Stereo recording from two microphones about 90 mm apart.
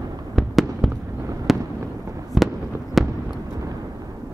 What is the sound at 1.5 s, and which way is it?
Fireworks, centre (ahead or behind).